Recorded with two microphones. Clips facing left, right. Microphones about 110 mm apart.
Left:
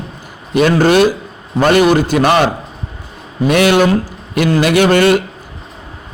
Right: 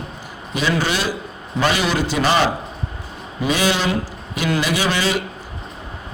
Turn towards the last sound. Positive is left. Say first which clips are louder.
# left 10 dB
turn(degrees=60)  # may be behind; listen again after turning